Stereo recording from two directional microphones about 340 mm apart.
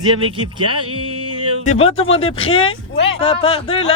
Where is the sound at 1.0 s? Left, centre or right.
Centre.